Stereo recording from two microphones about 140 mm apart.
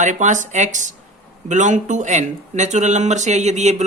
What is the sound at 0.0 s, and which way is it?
Speech, 60° right (ahead or behind).